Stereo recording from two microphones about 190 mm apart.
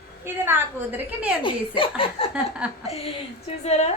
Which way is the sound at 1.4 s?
30° left (ahead or behind).